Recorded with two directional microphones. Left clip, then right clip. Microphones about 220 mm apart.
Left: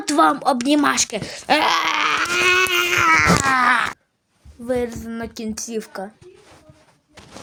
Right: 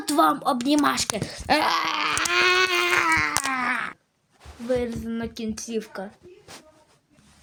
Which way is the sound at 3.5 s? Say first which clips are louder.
Left 9 dB; 10° left (ahead or behind).